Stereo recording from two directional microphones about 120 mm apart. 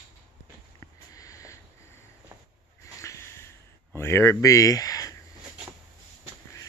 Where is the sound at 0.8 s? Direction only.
30° left (ahead or behind).